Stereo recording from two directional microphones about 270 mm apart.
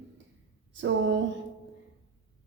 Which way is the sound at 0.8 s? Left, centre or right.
Right.